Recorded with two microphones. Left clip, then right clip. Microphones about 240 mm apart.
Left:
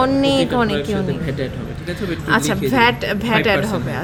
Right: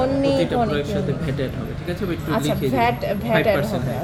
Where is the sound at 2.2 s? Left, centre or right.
Left.